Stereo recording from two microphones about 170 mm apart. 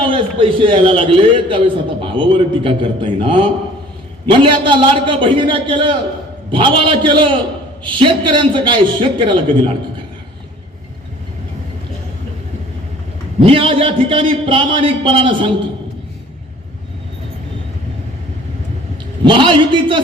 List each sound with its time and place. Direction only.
0.0 s a man's voice: 30° right (ahead or behind)
13.4 s a man's voice: 35° right (ahead or behind)
19.2 s a man's voice: 30° right (ahead or behind)